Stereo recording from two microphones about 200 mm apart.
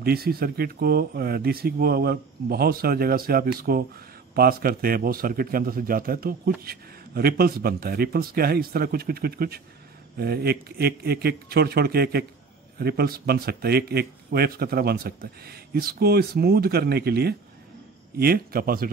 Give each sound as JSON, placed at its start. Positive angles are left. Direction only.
{"t": 0.0, "sound": "speech", "side_deg": -50}